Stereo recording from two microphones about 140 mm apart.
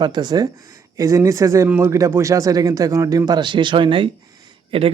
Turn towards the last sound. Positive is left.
turn(degrees=-45)  # may be behind; listen again after turning